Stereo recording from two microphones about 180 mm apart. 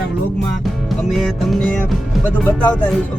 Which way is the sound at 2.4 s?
10° left (ahead or behind).